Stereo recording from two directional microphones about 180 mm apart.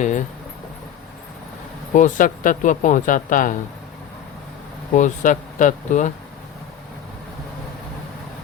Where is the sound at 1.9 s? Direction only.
45° left (ahead or behind).